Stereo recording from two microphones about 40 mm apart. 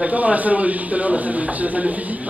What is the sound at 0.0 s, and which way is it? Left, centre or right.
A man's voice, right.